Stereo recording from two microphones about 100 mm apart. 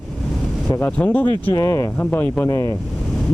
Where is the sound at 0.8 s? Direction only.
15° left (ahead or behind).